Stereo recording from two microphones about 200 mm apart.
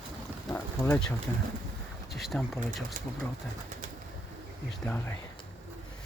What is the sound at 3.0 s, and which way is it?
Speech, 40° right (ahead or behind).